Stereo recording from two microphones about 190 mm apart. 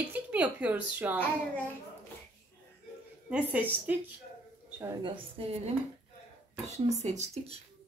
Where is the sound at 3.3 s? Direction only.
10° right (ahead or behind).